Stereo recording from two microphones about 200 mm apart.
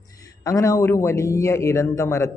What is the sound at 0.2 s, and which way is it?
Speech, 15° left (ahead or behind).